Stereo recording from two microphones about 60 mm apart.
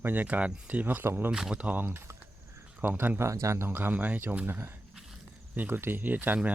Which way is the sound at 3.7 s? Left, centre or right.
Right.